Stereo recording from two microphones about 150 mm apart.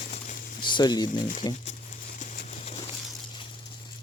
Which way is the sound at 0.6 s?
30° left (ahead or behind).